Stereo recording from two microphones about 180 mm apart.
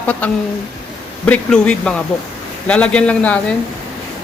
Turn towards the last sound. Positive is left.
turn(degrees=5)  # may be behind; listen again after turning